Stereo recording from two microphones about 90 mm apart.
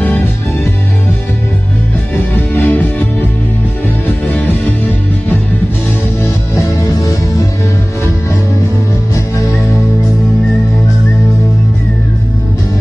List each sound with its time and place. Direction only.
2.5 s music: 25° left (ahead or behind)
6.8 s music: 35° left (ahead or behind)